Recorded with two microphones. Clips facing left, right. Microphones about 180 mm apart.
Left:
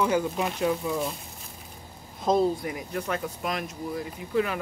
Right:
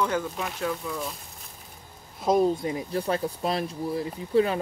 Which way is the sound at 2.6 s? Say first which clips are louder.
Right 3 dB; 30° right (ahead or behind).